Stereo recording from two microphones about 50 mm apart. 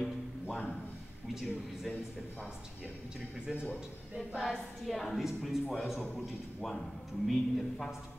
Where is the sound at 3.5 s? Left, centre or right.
Centre.